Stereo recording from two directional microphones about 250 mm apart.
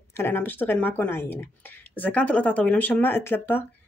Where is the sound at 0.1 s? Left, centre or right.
Centre.